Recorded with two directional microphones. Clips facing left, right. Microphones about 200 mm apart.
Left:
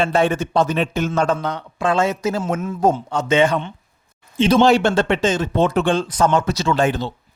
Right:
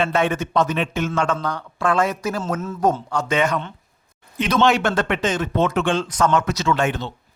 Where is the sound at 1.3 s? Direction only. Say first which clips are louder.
Left 1 dB; 20° left (ahead or behind).